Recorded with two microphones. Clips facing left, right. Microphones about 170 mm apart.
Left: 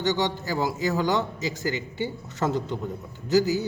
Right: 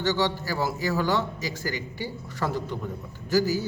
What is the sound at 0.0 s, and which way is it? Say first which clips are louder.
A man's voice: even; 20° left (ahead or behind).